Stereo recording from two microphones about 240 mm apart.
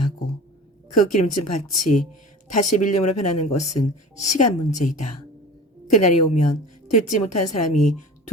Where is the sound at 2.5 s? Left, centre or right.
Left.